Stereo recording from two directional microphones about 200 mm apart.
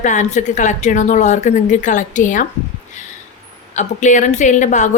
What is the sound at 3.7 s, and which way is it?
A woman's voice, 40° left (ahead or behind).